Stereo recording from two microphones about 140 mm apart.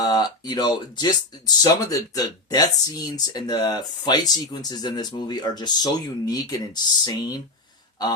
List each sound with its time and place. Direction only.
0.0 s speech: 30° left (ahead or behind)